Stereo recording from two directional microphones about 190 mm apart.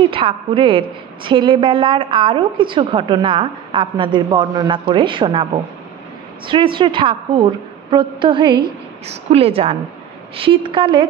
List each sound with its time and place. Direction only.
0.1 s a woman's voice: 25° right (ahead or behind)